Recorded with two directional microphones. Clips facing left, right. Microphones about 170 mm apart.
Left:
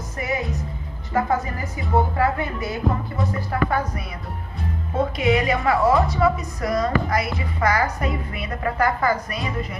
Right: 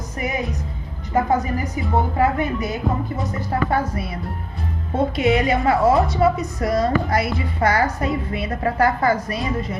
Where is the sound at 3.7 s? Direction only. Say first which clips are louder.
Right 3 dB; 30° right (ahead or behind).